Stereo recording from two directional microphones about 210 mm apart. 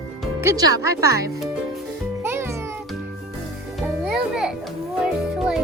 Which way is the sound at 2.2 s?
10° right (ahead or behind).